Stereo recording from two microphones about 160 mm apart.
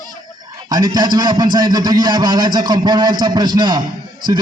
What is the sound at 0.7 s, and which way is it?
A man's voice, 25° right (ahead or behind).